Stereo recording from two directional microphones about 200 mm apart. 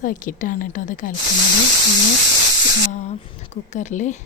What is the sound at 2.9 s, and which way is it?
Speech, 35° left (ahead or behind).